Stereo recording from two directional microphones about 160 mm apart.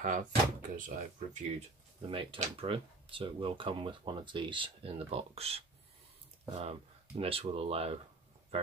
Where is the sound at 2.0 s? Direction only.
35° right (ahead or behind).